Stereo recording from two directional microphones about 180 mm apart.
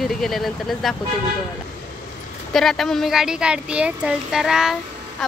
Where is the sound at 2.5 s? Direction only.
Centre (ahead or behind).